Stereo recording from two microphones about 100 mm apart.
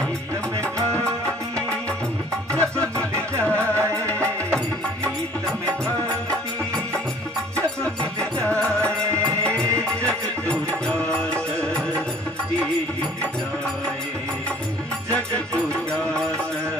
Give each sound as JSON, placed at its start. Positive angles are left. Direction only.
{"t": 2.5, "sound": "music", "side_deg": 10}
{"t": 3.5, "sound": "music", "side_deg": -25}
{"t": 8.6, "sound": "music", "side_deg": -30}
{"t": 9.4, "sound": "music", "side_deg": 10}